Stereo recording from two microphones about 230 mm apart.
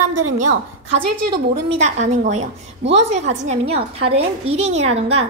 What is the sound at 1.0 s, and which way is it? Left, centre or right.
Speech, right.